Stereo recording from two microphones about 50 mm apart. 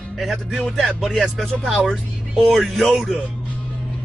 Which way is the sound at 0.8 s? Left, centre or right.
Centre.